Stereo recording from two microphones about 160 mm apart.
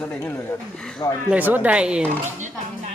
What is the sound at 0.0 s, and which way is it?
Speech, 10° left (ahead or behind).